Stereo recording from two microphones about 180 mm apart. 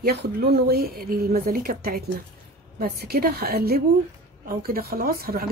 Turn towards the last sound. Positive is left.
turn(degrees=-55)  # may be behind; listen again after turning